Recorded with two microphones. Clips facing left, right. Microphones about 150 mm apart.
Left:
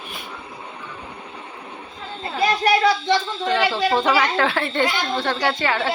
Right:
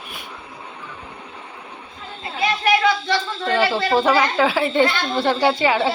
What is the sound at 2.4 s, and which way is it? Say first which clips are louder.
Speech: left 1 dB; 35° left (ahead or behind).